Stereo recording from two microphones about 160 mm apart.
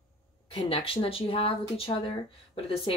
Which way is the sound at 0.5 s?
35° left (ahead or behind).